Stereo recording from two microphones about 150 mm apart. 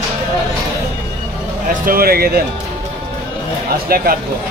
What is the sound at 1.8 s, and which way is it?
Speech, 80° right.